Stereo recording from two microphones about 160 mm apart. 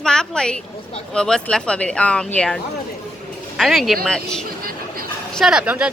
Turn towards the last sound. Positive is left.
turn(degrees=-5)  # may be behind; listen again after turning